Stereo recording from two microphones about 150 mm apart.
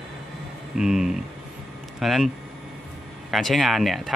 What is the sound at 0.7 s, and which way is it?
Speech, 5° right (ahead or behind).